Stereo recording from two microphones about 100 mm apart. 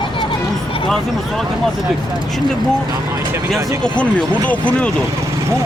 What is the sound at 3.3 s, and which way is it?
Speech, 25° right (ahead or behind).